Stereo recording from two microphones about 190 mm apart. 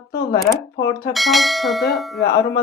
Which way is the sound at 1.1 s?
Centre (ahead or behind).